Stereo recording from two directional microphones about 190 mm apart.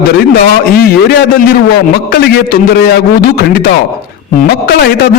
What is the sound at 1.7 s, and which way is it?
Speech, 55° left (ahead or behind).